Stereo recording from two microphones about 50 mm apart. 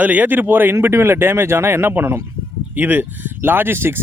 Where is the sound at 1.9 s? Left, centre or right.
Right.